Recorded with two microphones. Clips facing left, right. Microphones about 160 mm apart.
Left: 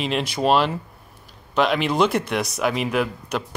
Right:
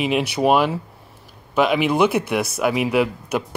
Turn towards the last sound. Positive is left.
turn(degrees=-10)  # may be behind; listen again after turning